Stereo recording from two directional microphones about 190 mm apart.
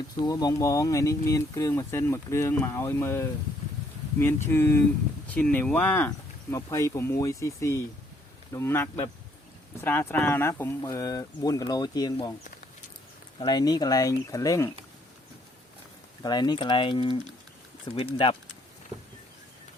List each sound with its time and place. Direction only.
0.3 s speech: 20° left (ahead or behind)
13.4 s speech: 20° left (ahead or behind)
16.2 s speech: 20° left (ahead or behind)